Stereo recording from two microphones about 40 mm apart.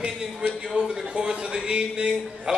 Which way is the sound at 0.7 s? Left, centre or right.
Right.